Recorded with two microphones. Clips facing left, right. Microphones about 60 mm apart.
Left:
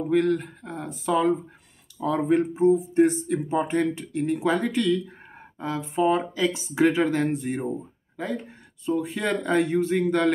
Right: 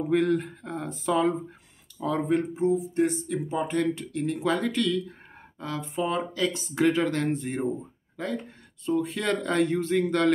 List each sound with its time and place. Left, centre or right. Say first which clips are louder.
0.1 s speech: left 2 dB; centre
2.5 s speech: left 5 dB; left; by 10.3 s centre